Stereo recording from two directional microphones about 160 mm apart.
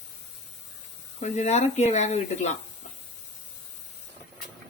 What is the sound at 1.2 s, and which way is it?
Speech, 45° left (ahead or behind).